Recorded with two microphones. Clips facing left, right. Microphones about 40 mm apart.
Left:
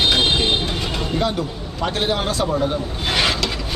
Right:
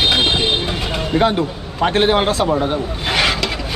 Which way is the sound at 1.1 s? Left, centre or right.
Right.